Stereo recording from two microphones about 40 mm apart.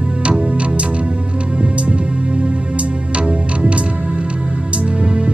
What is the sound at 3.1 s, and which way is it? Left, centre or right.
Music, right.